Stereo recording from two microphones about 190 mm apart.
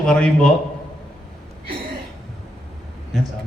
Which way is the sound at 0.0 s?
5° left (ahead or behind).